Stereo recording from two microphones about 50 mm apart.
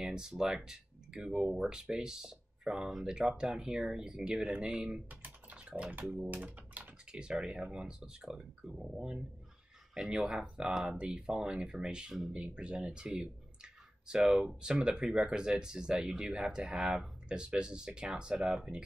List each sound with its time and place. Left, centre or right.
0.0 s speech: centre
6.3 s speech: right
7.1 s speech: centre